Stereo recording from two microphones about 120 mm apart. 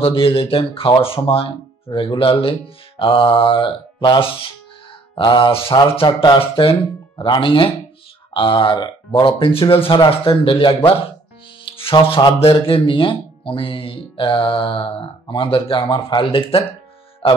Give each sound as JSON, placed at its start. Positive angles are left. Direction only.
{"t": 0.0, "sound": "speech", "side_deg": 50}
{"t": 6.0, "sound": "speech", "side_deg": 40}
{"t": 6.4, "sound": "speech", "side_deg": 50}
{"t": 17.2, "sound": "music", "side_deg": 55}